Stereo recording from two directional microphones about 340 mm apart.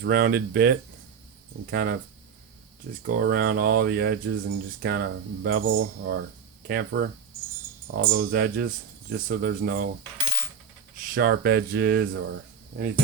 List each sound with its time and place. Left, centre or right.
0.0 s speech: right
3.1 s speech: right
11.0 s speech: right